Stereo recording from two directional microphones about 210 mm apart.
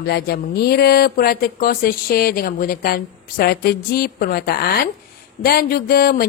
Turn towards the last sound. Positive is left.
turn(degrees=45)  # may be behind; listen again after turning